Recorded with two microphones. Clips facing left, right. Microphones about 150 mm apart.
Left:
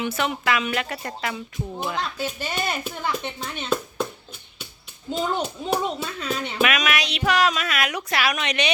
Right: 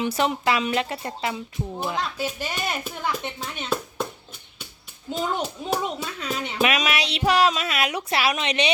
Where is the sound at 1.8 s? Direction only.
10° right (ahead or behind).